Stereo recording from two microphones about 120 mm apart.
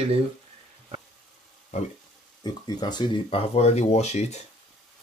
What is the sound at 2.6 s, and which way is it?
Speech, 35° left (ahead or behind).